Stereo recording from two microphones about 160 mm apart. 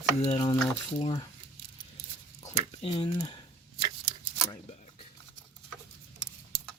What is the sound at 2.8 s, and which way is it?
Speech, 35° left (ahead or behind).